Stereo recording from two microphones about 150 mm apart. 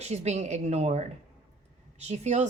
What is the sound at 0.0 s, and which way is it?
Speech, 45° right (ahead or behind).